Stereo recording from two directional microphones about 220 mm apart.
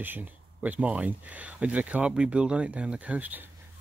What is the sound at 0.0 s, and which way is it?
Speech, 10° right (ahead or behind).